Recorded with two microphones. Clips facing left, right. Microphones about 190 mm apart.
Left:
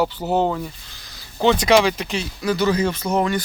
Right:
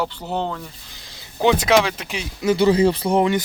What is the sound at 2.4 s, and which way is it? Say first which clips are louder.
Speech: right 4 dB; 25° right (ahead or behind).